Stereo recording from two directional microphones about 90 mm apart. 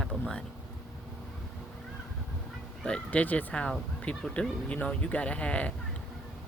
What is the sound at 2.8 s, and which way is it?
Speech, 15° left (ahead or behind).